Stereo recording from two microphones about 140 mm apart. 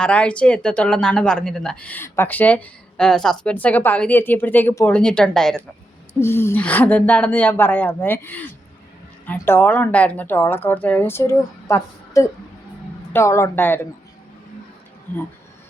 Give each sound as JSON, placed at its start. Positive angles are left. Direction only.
{"t": 0.0, "sound": "speech", "side_deg": 10}
{"t": 6.1, "sound": "speech", "side_deg": 20}